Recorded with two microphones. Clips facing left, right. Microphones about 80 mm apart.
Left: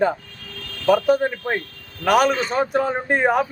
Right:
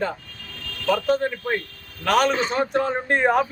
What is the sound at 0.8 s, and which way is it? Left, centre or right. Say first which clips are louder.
Speech: left 4 dB; centre.